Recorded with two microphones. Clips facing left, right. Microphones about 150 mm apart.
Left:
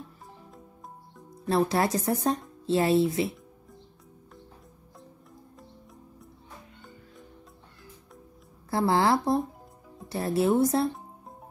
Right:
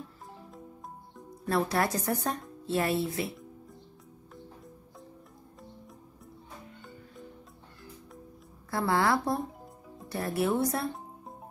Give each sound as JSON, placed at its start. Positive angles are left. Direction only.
{"t": 0.5, "sound": "music", "side_deg": 0}
{"t": 1.5, "sound": "speech", "side_deg": 25}
{"t": 8.6, "sound": "speech", "side_deg": 25}